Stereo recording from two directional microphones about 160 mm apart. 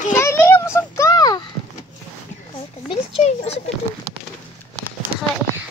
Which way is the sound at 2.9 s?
40° left (ahead or behind).